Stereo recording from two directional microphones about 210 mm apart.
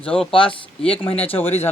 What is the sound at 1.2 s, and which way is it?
Speech, 10° left (ahead or behind).